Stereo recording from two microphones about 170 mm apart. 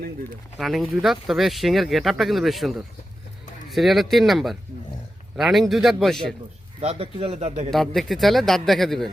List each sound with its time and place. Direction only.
0.6 s speech: centre (ahead or behind)
6.8 s speech: 35° right (ahead or behind)
7.7 s speech: centre (ahead or behind)